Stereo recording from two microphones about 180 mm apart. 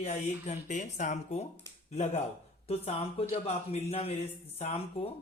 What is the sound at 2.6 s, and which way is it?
A man's voice, 35° left (ahead or behind).